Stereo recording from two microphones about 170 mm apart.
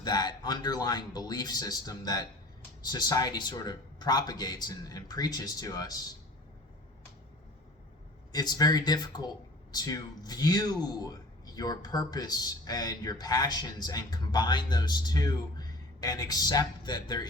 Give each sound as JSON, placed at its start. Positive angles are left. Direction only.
{"t": 0.0, "sound": "speech", "side_deg": 25}
{"t": 8.3, "sound": "speech", "side_deg": 20}